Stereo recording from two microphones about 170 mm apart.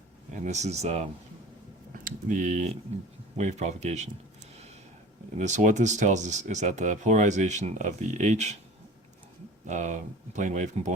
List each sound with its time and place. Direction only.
0.3 s speech: 45° right (ahead or behind)
2.0 s speech: 50° right (ahead or behind)
5.4 s speech: 45° right (ahead or behind)
9.6 s speech: 45° right (ahead or behind)